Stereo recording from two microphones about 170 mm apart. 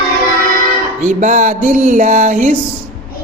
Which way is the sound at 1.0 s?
45° right (ahead or behind).